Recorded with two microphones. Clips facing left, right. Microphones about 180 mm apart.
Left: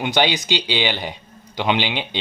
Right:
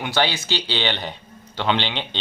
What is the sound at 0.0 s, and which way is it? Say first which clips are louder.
Speech: left 3 dB; 15° left (ahead or behind).